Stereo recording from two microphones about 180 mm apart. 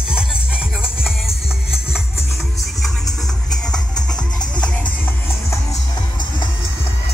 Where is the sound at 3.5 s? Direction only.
5° left (ahead or behind).